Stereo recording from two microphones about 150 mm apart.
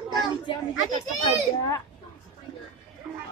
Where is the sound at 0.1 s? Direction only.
30° left (ahead or behind).